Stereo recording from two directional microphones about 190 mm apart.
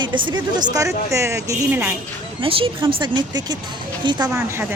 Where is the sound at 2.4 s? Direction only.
30° right (ahead or behind).